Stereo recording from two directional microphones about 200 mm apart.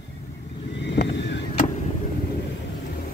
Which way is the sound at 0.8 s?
60° left (ahead or behind).